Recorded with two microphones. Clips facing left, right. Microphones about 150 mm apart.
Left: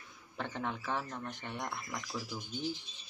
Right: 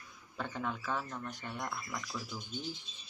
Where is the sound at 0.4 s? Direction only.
20° left (ahead or behind).